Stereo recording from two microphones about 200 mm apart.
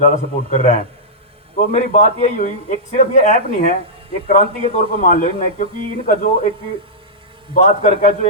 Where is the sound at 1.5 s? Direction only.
40° left (ahead or behind).